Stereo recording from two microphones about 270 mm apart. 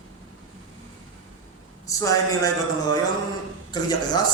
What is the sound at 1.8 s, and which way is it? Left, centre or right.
A man's voice, centre.